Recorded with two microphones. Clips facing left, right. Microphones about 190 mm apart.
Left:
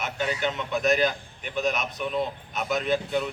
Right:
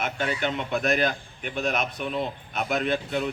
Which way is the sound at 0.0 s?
50° right (ahead or behind).